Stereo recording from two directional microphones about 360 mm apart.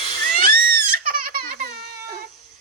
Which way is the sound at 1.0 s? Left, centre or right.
Right.